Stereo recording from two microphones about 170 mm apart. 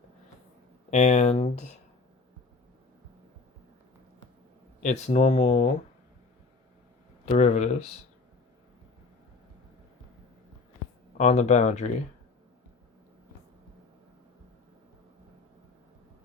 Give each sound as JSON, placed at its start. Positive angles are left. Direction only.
{"t": 0.9, "sound": "speech", "side_deg": 40}
{"t": 4.8, "sound": "speech", "side_deg": 45}
{"t": 7.3, "sound": "speech", "side_deg": 45}
{"t": 11.2, "sound": "speech", "side_deg": 45}